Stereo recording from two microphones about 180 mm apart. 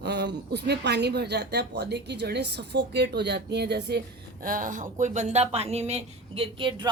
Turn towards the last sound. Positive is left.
turn(degrees=-30)  # may be behind; listen again after turning